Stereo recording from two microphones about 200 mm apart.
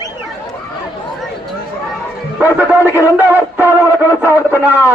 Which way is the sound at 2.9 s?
10° right (ahead or behind).